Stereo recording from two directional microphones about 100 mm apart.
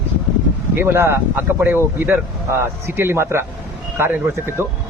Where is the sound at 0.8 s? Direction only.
25° right (ahead or behind).